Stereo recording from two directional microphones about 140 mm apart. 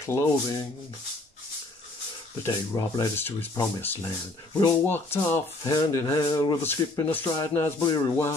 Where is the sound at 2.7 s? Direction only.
20° left (ahead or behind).